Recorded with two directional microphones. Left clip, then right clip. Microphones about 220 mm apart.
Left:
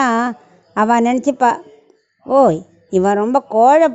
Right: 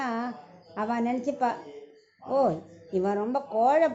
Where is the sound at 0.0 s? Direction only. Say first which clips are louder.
Left 15 dB; 50° left (ahead or behind).